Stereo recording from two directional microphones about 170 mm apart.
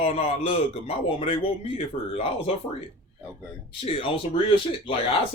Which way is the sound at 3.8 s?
30° left (ahead or behind).